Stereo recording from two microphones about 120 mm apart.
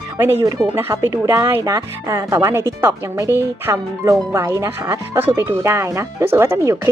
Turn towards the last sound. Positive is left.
turn(degrees=-25)  # may be behind; listen again after turning